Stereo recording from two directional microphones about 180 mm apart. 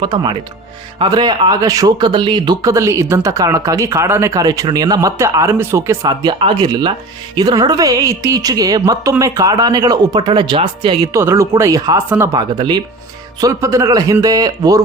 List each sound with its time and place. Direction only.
0.0 s speech: 25° right (ahead or behind)
11.1 s speech: 15° right (ahead or behind)